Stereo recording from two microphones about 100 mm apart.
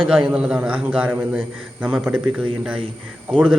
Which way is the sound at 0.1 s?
10° right (ahead or behind).